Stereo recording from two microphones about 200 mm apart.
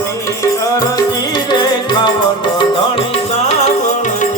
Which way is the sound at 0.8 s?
20° left (ahead or behind).